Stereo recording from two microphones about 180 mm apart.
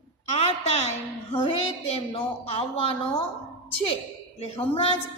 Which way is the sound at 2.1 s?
30° left (ahead or behind).